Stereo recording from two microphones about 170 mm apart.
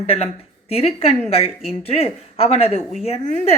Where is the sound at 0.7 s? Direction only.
35° left (ahead or behind).